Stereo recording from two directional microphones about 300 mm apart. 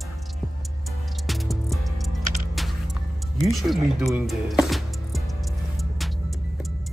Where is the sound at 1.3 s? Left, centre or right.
Centre.